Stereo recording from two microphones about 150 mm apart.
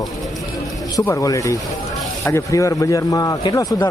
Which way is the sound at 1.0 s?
20° left (ahead or behind).